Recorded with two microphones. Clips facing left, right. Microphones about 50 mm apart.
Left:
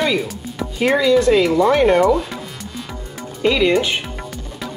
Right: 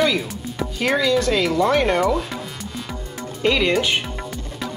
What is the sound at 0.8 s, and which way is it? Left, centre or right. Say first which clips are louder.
Music: left 5 dB; left.